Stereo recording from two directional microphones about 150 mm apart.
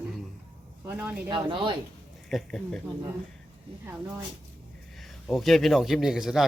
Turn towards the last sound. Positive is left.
turn(degrees=0)  # may be behind; listen again after turning